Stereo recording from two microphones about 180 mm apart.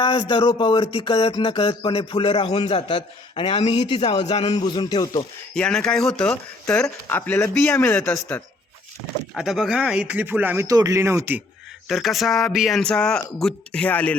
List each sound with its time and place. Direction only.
0.0 s speech: 30° left (ahead or behind)
4.6 s speech: 25° left (ahead or behind)
5.5 s speech: 5° left (ahead or behind)
9.3 s speech: centre (ahead or behind)
11.9 s speech: centre (ahead or behind)